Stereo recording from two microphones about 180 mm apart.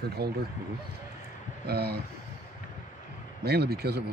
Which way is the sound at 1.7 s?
60° right (ahead or behind).